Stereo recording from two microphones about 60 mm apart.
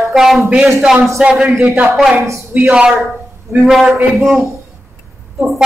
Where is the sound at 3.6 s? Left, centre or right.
Centre.